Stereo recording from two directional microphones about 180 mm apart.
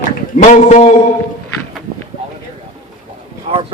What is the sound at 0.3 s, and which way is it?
Speech, 40° left (ahead or behind).